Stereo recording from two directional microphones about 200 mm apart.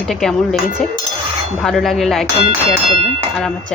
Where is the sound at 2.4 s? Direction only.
30° right (ahead or behind).